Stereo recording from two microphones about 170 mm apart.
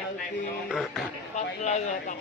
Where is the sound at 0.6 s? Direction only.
Centre (ahead or behind).